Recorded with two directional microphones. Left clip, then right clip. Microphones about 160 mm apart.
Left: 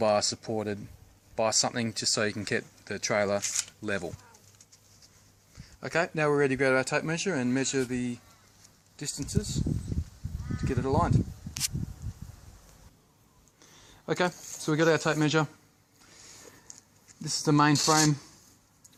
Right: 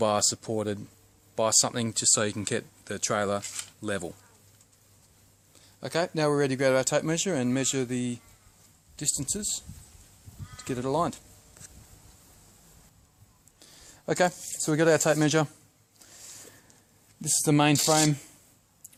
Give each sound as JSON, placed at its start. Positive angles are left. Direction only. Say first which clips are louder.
{"t": 0.0, "sound": "speech", "louder": "even", "side_deg": -40}
{"t": 5.8, "sound": "speech", "louder": "even", "side_deg": -40}
{"t": 10.6, "sound": "speech", "louder": "even", "side_deg": -55}
{"t": 13.6, "sound": "speech", "louder": "right 2 dB", "side_deg": -35}
{"t": 17.4, "sound": "speech", "louder": "even", "side_deg": -45}
{"t": 17.8, "sound": "speech", "louder": "even", "side_deg": -30}